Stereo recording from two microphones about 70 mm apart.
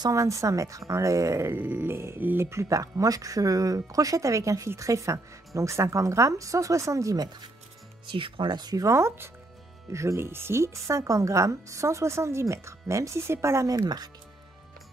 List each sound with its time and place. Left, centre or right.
0.1 s speech: right
1.5 s grunt: right
2.2 s speech: right
8.5 s speech: right
8.8 s speech: right
13.7 s speech: right